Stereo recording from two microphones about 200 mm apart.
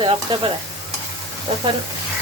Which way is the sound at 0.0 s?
25° right (ahead or behind).